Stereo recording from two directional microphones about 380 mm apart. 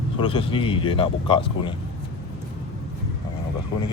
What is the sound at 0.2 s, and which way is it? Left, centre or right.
A man's voice, centre.